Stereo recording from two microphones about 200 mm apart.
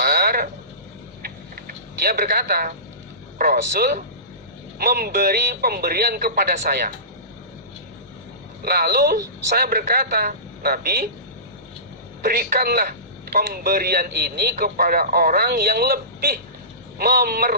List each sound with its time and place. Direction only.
0.0 s frog: 50° right (ahead or behind)
1.2 s a sound: 50° right (ahead or behind)
3.3 s a man's voice: 45° right (ahead or behind)
8.6 s a man's voice: 50° right (ahead or behind)
12.2 s a man's voice: 45° right (ahead or behind)